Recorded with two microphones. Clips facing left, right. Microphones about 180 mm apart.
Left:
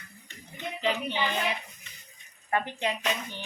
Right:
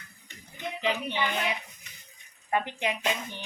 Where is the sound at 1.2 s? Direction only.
15° right (ahead or behind).